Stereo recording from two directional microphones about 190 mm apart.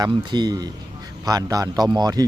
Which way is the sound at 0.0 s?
25° right (ahead or behind).